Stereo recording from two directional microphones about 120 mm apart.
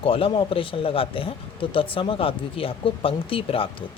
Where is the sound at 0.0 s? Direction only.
50° left (ahead or behind).